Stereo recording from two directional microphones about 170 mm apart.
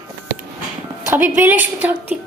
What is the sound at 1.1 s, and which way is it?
A woman's voice, 15° right (ahead or behind).